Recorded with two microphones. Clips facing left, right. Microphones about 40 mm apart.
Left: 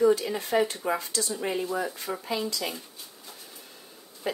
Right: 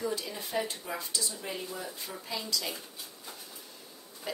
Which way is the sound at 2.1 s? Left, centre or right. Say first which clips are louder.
Left 6 dB; left.